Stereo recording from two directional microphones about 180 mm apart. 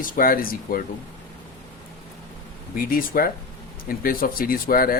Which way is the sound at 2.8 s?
55° left (ahead or behind).